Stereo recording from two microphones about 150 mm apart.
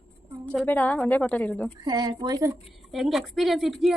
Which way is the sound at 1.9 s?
25° right (ahead or behind).